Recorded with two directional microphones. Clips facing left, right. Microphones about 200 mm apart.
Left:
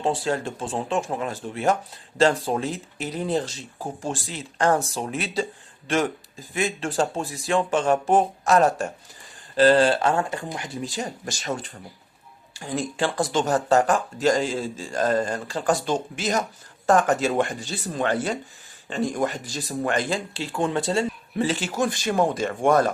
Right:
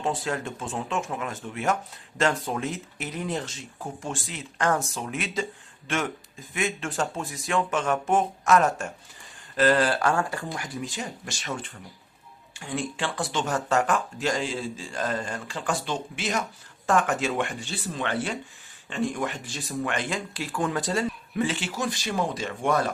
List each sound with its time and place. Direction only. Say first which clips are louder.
0.0 s speech: left 4 dB; 30° left (ahead or behind)
6.5 s speech: left 3 dB; 35° left (ahead or behind)